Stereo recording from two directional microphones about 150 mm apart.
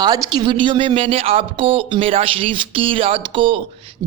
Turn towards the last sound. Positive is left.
turn(degrees=-35)  # may be behind; listen again after turning